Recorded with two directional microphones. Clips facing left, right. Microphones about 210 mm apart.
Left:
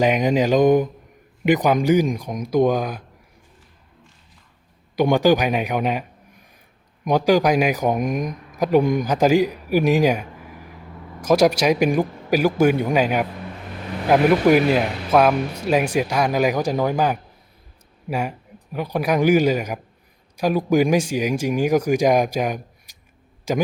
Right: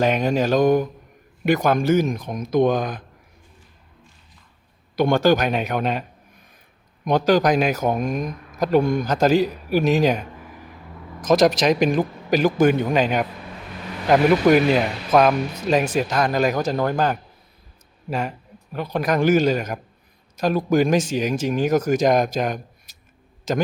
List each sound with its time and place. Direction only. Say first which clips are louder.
0.0 s speech: left 2 dB; 15° left (ahead or behind)
4.9 s speech: left 1 dB; 15° left (ahead or behind)